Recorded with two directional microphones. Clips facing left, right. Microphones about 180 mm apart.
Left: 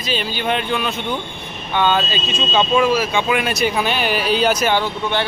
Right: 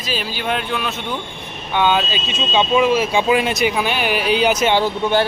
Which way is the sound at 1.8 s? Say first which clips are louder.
Even; 10° right (ahead or behind).